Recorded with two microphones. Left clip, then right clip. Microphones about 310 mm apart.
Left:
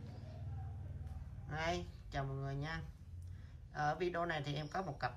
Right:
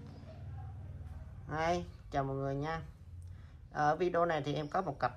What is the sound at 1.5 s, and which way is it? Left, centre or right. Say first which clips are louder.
A woman's voice: right 6 dB; centre.